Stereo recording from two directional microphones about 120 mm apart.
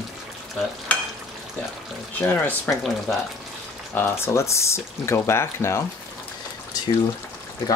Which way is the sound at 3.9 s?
20° left (ahead or behind).